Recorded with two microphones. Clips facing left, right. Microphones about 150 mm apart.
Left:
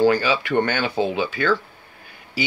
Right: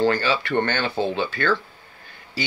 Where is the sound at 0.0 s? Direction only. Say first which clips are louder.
Left 3 dB; 10° left (ahead or behind).